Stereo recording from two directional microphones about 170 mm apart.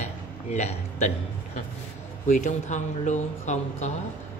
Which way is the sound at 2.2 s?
45° left (ahead or behind).